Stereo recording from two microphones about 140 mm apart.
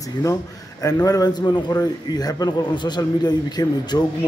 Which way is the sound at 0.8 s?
25° left (ahead or behind).